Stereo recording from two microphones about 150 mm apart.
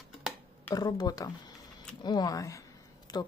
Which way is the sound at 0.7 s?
25° left (ahead or behind).